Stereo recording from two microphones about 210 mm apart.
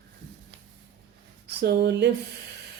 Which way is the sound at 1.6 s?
55° right (ahead or behind).